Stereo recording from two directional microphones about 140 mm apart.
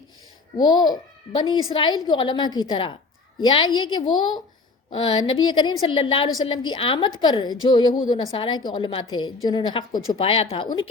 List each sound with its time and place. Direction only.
0.5 s a child's voice: 30° left (ahead or behind)
10.2 s speech: 45° left (ahead or behind)